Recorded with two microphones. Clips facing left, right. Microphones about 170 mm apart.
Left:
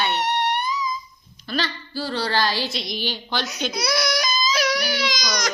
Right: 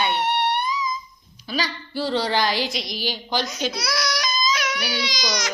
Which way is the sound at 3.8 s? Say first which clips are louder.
Left 3 dB; 25° left (ahead or behind).